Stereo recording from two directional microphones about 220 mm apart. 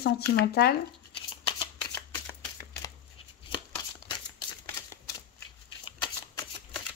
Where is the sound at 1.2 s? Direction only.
20° left (ahead or behind).